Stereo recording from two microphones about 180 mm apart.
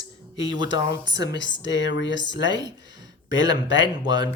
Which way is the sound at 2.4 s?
25° right (ahead or behind).